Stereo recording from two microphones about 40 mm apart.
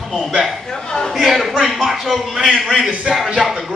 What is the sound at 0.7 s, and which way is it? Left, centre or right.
Speech, centre.